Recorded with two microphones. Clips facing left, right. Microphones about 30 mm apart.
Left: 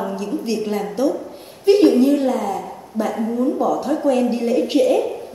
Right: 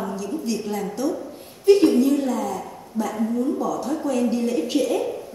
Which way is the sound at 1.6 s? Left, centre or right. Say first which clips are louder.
Left 3 dB; left.